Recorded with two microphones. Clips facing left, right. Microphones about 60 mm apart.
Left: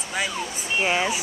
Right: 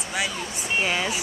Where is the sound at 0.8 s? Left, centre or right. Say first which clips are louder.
Left 3 dB; centre.